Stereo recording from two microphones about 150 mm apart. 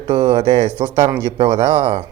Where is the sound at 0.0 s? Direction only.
35° right (ahead or behind).